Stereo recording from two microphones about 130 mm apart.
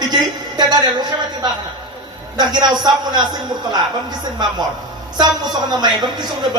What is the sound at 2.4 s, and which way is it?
Speech, 35° right (ahead or behind).